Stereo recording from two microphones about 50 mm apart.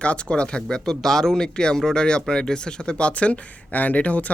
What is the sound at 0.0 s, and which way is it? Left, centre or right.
Speech, left.